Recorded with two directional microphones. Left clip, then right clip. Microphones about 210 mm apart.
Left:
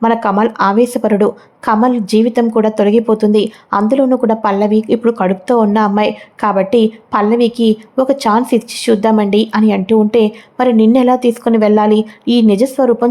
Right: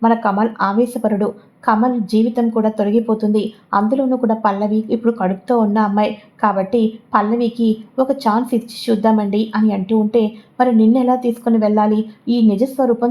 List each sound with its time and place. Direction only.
0.0 s a woman's voice: 25° left (ahead or behind)